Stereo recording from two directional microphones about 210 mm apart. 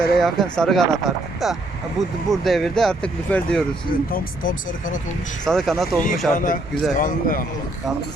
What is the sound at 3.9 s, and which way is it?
Speech, 40° left (ahead or behind).